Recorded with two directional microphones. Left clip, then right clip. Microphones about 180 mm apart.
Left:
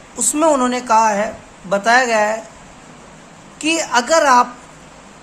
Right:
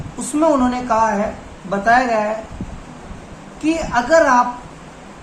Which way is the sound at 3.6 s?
50° left (ahead or behind).